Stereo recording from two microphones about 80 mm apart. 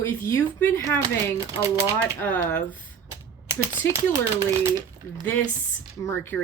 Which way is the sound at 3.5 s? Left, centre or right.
Right.